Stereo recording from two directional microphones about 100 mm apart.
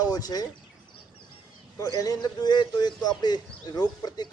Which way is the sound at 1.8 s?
40° left (ahead or behind).